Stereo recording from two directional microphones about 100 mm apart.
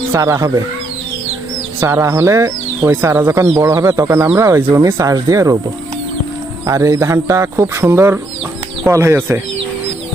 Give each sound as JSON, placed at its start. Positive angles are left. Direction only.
{"t": 0.1, "sound": "speech", "side_deg": -30}
{"t": 1.8, "sound": "speech", "side_deg": -25}
{"t": 6.7, "sound": "speech", "side_deg": -35}